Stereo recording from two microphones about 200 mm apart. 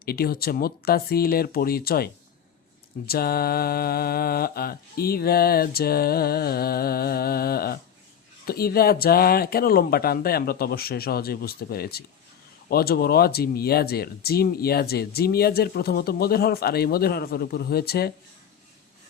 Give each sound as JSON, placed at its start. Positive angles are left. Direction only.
{"t": 0.0, "sound": "speech", "side_deg": 50}
{"t": 3.1, "sound": "speech", "side_deg": 50}